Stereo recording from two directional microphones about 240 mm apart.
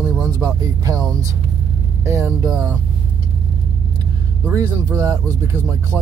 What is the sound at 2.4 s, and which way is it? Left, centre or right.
Speech, centre.